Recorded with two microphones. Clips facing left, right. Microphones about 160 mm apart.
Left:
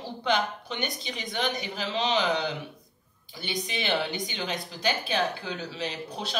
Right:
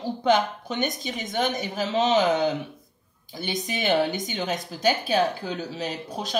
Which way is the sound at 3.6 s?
45° right (ahead or behind).